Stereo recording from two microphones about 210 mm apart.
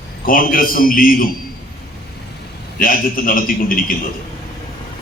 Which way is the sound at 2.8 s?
40° left (ahead or behind).